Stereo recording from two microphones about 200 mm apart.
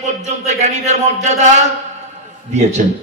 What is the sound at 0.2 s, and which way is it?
A man's voice, 35° right (ahead or behind).